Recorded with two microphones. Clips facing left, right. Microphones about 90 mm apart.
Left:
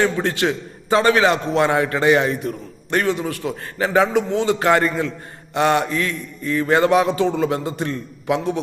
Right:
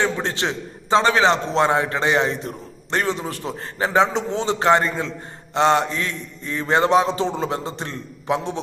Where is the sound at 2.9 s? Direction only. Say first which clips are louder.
Left 3 dB; 30° right (ahead or behind).